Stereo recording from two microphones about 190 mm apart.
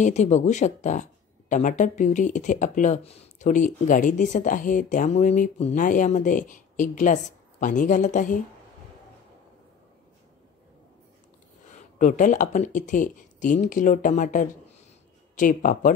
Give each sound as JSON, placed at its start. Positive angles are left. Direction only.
{"t": 0.0, "sound": "speech", "side_deg": 40}
{"t": 12.0, "sound": "speech", "side_deg": 45}